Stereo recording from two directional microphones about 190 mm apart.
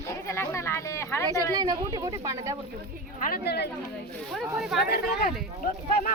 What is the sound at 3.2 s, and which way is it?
Speech, 55° left (ahead or behind).